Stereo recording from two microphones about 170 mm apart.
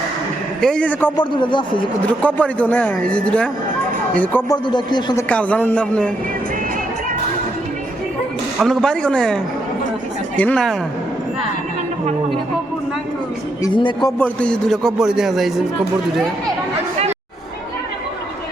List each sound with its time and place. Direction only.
0.6 s speech: 5° left (ahead or behind)
1.1 s a man's voice: 30° left (ahead or behind)
2.2 s speech: 10° left (ahead or behind)
4.4 s a man's voice: 25° left (ahead or behind)
5.3 s speech: 10° left (ahead or behind)
8.5 s a man's voice: centre (ahead or behind)
13.6 s a man's voice: 25° left (ahead or behind)
14.2 s a man's voice: 5° left (ahead or behind)